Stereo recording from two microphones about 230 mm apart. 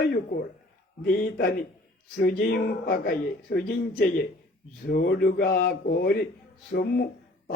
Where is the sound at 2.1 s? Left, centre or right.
Left.